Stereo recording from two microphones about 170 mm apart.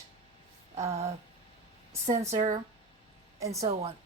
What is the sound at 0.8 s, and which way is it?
Speech, 40° right (ahead or behind).